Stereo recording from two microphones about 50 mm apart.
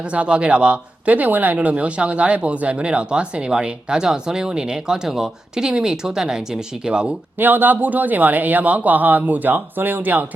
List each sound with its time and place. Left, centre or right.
0.0 s speech: right
7.3 s speech: right